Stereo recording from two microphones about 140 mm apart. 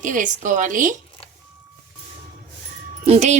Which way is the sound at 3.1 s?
55° right (ahead or behind).